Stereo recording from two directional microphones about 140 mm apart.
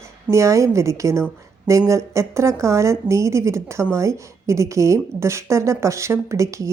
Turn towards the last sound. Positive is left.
turn(degrees=-20)  # may be behind; listen again after turning